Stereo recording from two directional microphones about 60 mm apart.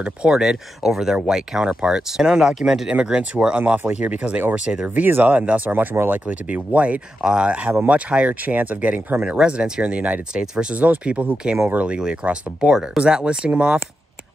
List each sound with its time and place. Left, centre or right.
0.0 s speech: centre
2.9 s speech: centre
10.3 s speech: centre